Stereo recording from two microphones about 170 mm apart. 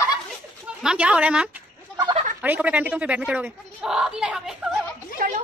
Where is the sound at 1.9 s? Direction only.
25° right (ahead or behind).